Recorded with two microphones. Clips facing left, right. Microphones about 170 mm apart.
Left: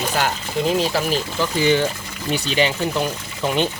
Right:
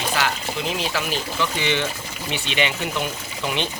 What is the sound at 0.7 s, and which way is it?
Speech, 40° left (ahead or behind).